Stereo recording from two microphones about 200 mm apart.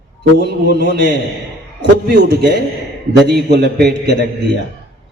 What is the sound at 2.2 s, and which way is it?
A man's voice, 55° right (ahead or behind).